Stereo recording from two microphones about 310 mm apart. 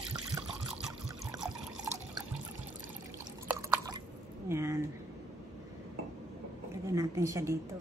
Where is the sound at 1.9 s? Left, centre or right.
Centre.